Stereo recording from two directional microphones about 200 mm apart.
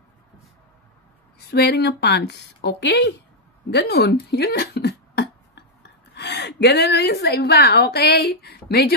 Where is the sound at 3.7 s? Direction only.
55° left (ahead or behind).